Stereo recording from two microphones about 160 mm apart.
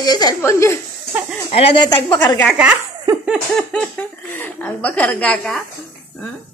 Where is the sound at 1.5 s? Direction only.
35° left (ahead or behind).